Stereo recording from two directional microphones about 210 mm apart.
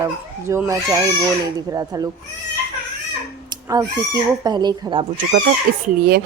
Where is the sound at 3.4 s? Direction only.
15° right (ahead or behind).